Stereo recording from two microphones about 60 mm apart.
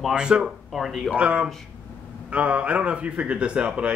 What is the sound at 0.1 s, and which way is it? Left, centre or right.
Speech, centre.